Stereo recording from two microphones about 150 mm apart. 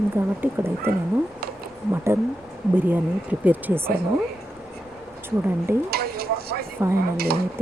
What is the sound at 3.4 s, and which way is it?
Speech, 10° right (ahead or behind).